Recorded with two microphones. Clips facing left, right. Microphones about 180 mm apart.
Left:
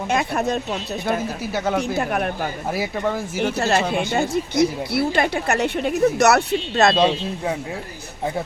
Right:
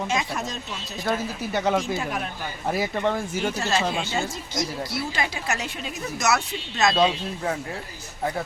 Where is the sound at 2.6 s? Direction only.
5° left (ahead or behind).